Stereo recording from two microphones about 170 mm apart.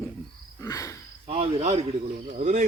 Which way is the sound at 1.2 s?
35° right (ahead or behind).